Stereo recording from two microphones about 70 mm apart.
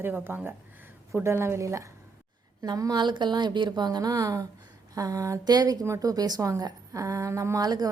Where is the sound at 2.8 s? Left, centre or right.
Right.